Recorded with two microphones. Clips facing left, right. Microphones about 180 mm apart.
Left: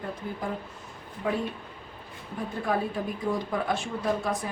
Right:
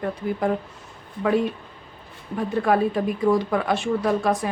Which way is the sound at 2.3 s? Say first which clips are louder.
Right 8 dB; 75° right (ahead or behind).